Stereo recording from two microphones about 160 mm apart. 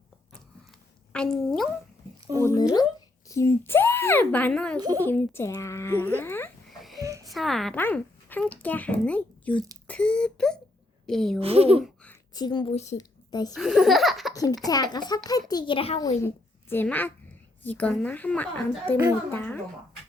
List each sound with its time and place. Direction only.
1.1 s speech: 5° left (ahead or behind)
2.4 s a child's voice: 20° left (ahead or behind)
4.8 s a child's voice: 25° right (ahead or behind)
5.0 s speech: 15° left (ahead or behind)
6.7 s a sound: centre (ahead or behind)
7.3 s a woman's voice: centre (ahead or behind)
11.3 s speech: 35° right (ahead or behind)
12.3 s a child's voice: 25° left (ahead or behind)
12.7 s a woman's voice: 45° left (ahead or behind)
13.0 s a sound: 25° left (ahead or behind)
13.5 s speech: centre (ahead or behind)
14.7 s a child's voice: 25° left (ahead or behind)
16.0 s a woman's voice: 20° left (ahead or behind)